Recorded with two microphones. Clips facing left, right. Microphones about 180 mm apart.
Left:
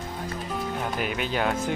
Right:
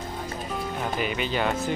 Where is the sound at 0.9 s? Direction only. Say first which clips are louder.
Right 2 dB; 5° left (ahead or behind).